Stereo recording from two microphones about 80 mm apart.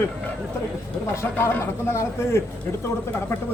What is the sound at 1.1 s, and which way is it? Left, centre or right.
Speech, left.